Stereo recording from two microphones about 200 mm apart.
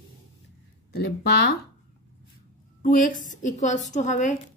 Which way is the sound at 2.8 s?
40° left (ahead or behind).